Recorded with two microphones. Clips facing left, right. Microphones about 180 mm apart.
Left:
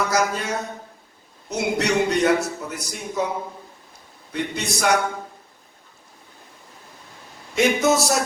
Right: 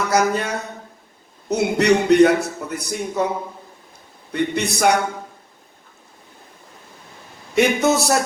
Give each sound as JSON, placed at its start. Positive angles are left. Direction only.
{"t": 0.1, "sound": "speech", "side_deg": -60}
{"t": 4.3, "sound": "speech", "side_deg": -60}
{"t": 7.5, "sound": "speech", "side_deg": -60}